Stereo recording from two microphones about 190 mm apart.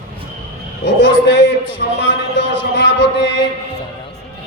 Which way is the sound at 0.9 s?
65° left (ahead or behind).